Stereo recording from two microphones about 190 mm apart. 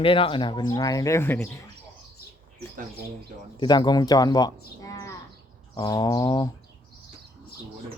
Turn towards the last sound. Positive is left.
turn(degrees=20)  # may be behind; listen again after turning